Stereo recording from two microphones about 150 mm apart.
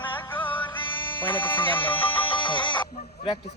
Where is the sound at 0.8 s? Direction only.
35° left (ahead or behind).